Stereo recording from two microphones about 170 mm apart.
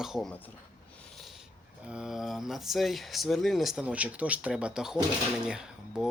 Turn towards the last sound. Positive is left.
turn(degrees=-5)  # may be behind; listen again after turning